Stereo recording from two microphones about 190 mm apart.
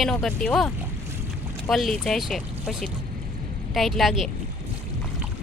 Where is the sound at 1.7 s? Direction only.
Centre (ahead or behind).